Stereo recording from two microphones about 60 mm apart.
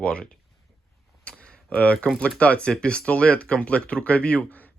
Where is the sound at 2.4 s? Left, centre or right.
Left.